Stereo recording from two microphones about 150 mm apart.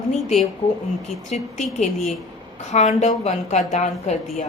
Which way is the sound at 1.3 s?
45° left (ahead or behind).